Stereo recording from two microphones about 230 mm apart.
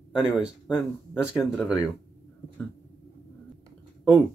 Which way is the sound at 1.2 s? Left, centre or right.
Centre.